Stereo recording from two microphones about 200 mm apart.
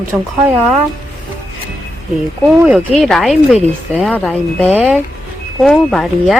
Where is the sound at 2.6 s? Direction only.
Centre (ahead or behind).